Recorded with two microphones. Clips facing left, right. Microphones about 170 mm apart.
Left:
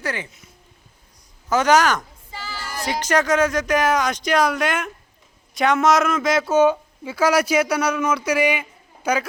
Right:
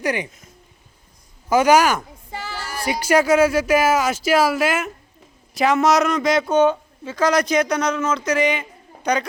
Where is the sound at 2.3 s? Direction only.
55° right (ahead or behind).